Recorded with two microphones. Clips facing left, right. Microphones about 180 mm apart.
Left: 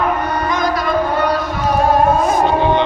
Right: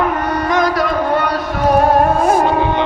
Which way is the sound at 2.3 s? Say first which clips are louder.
Right 1 dB; 10° right (ahead or behind).